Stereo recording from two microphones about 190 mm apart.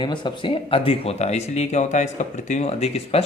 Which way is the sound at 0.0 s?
25° left (ahead or behind).